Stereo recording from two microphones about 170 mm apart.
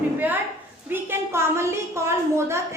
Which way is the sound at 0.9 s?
15° right (ahead or behind).